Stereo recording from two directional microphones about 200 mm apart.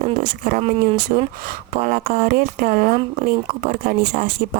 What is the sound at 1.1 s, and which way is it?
Speech, 35° right (ahead or behind).